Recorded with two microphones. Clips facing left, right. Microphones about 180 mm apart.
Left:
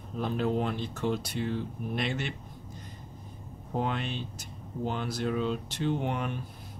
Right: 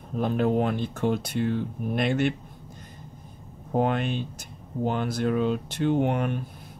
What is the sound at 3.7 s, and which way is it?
Speech, 55° right (ahead or behind).